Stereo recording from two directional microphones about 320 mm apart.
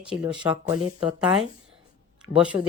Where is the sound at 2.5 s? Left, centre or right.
Centre.